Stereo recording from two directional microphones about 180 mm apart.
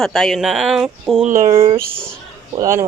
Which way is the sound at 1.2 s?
45° right (ahead or behind).